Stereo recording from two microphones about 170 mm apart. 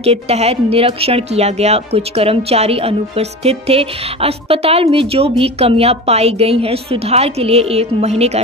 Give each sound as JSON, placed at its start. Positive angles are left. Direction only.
{"t": 0.0, "sound": "a woman's voice", "side_deg": -35}